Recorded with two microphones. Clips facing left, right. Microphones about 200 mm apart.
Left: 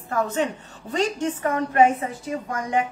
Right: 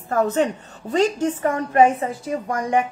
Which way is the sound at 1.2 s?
30° right (ahead or behind).